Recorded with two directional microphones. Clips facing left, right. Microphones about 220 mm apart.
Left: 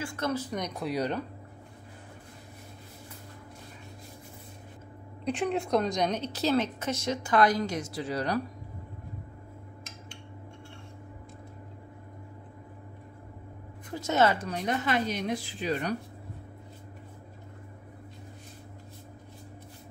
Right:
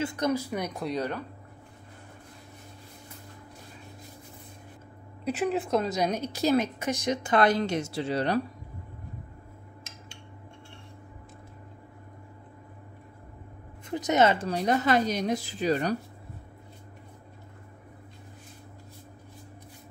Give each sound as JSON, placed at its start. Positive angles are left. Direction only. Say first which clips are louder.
{"t": 0.0, "sound": "a woman's voice", "louder": "right 4 dB", "side_deg": -20}
{"t": 0.9, "sound": "speech", "louder": "left 2 dB", "side_deg": 15}
{"t": 5.2, "sound": "a woman's voice", "louder": "right 1 dB", "side_deg": -5}
{"t": 13.8, "sound": "speech", "louder": "right 2 dB", "side_deg": -20}
{"t": 14.5, "sound": "speech", "louder": "right 5 dB", "side_deg": -35}